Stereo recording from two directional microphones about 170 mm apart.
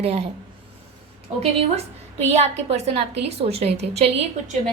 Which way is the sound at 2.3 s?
40° right (ahead or behind).